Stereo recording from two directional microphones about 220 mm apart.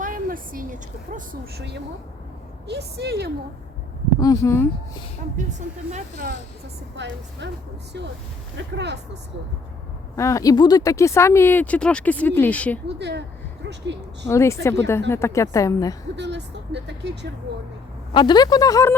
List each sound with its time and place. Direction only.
0.0 s a woman's voice: 40° right (ahead or behind)
4.2 s speech: 15° left (ahead or behind)
5.5 s speech: 35° right (ahead or behind)
6.9 s speech: 55° right (ahead or behind)
8.5 s speech: 50° right (ahead or behind)
10.2 s speech: 15° left (ahead or behind)
13.0 s speech: 50° right (ahead or behind)
14.3 s speech: 10° left (ahead or behind)
16.1 s speech: 50° right (ahead or behind)
18.1 s speech: 20° left (ahead or behind)